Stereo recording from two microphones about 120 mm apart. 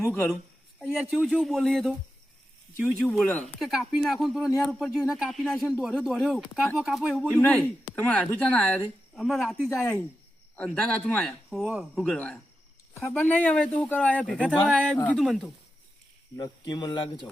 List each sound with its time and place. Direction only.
0.0 s a man's voice: 15° left (ahead or behind)
1.1 s speech: centre (ahead or behind)
2.8 s a man's voice: 15° left (ahead or behind)
3.6 s a man's voice: 5° right (ahead or behind)
12.9 s a man's voice: 20° left (ahead or behind); by 15.5 s centre (ahead or behind)
16.4 s speech: 35° left (ahead or behind)